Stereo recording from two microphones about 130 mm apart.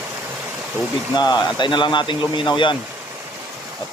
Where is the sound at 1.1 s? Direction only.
35° left (ahead or behind).